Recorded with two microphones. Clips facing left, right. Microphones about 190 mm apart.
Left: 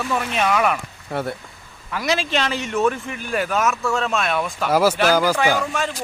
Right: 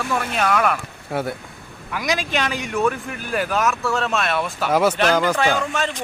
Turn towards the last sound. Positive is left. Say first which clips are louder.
# even
turn(degrees=10)  # may be behind; listen again after turning